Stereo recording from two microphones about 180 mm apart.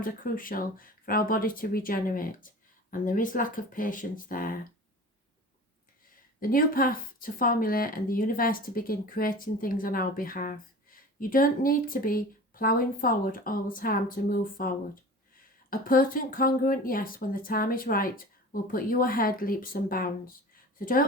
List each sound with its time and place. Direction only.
0.0 s speech: 50° left (ahead or behind)
6.4 s speech: 50° left (ahead or behind)
15.7 s speech: 50° left (ahead or behind)